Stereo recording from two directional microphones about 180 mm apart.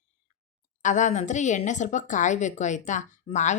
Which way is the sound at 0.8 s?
45° left (ahead or behind).